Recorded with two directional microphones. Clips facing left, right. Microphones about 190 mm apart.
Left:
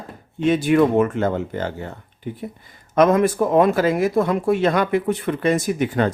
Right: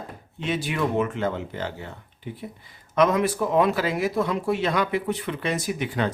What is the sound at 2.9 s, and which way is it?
Speech, 50° left (ahead or behind).